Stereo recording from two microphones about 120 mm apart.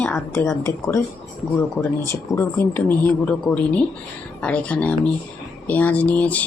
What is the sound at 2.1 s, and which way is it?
Speech, 20° left (ahead or behind).